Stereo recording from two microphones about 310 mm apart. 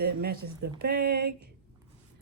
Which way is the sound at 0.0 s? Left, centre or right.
Right.